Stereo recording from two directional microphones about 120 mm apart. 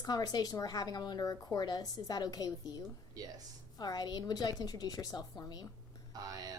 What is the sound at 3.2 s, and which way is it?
Music, 30° right (ahead or behind).